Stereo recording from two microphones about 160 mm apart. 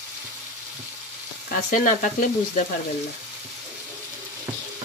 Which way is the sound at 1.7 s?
55° left (ahead or behind).